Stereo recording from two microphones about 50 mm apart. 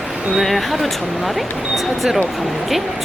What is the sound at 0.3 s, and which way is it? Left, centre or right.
Speech, centre.